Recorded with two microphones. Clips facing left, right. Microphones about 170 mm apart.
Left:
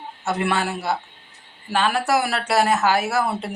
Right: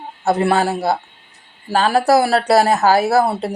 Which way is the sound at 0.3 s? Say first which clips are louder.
Right 7 dB; 35° right (ahead or behind).